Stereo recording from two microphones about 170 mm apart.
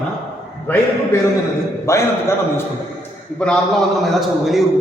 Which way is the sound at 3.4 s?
5° left (ahead or behind).